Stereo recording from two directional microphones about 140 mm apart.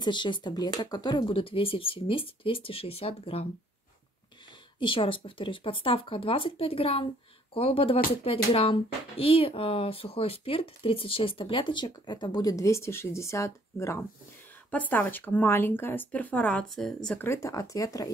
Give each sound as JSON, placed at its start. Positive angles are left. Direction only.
{"t": 0.0, "sound": "speech", "side_deg": 35}
{"t": 4.7, "sound": "speech", "side_deg": 35}
{"t": 17.2, "sound": "speech", "side_deg": 20}